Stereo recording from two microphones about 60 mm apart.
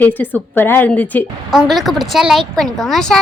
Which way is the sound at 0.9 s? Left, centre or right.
Left.